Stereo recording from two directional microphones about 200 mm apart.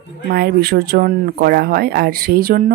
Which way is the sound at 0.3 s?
50° right (ahead or behind).